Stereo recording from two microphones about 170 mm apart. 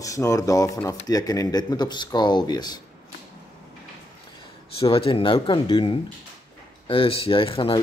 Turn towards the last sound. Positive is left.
turn(degrees=35)  # may be behind; listen again after turning